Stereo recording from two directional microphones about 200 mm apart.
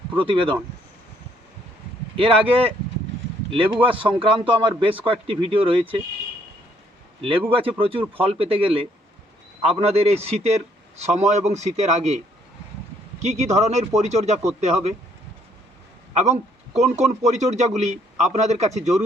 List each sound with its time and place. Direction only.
0.2 s a man's voice: 25° right (ahead or behind)
2.1 s a man's voice: 25° right (ahead or behind)
7.2 s a man's voice: 25° right (ahead or behind)
16.1 s a man's voice: 35° right (ahead or behind)